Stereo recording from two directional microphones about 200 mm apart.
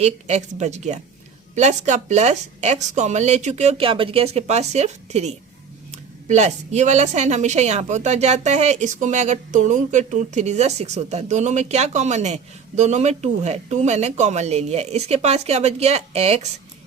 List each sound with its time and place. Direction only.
0.0 s speech: 35° right (ahead or behind)